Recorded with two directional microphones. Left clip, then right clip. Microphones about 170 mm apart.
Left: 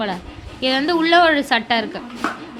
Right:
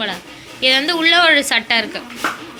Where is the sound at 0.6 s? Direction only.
25° left (ahead or behind).